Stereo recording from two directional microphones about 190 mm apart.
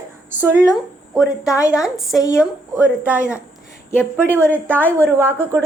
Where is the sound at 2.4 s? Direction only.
10° right (ahead or behind).